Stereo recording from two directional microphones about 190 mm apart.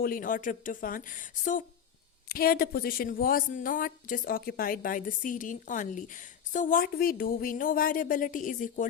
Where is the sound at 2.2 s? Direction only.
50° left (ahead or behind).